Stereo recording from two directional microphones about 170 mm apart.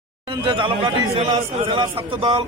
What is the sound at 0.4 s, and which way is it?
Speech, 30° right (ahead or behind).